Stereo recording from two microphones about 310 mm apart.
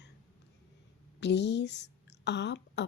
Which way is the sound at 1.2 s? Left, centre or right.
Left.